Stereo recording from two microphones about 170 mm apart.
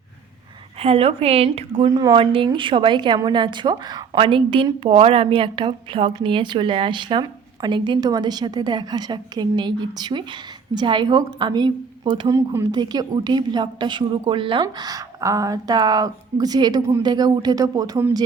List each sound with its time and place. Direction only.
0.8 s a woman's voice: 35° right (ahead or behind)
1.9 s a woman's voice: 20° right (ahead or behind)
2.1 s a woman's voice: 30° right (ahead or behind)